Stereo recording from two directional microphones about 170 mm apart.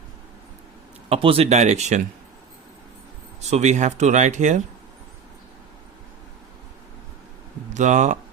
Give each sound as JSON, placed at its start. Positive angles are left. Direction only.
{"t": 1.1, "sound": "speech", "side_deg": -35}
{"t": 3.5, "sound": "speech", "side_deg": -45}
{"t": 7.7, "sound": "speech", "side_deg": -45}